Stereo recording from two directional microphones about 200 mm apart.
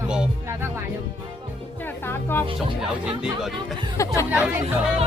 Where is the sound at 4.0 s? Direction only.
15° left (ahead or behind).